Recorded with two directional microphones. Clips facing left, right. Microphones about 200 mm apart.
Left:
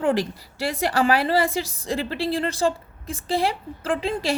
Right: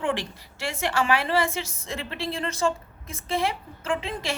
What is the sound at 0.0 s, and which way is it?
A woman's voice, 40° left (ahead or behind).